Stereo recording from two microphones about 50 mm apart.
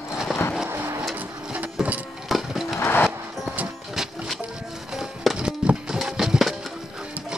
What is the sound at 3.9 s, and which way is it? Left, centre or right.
Music, centre.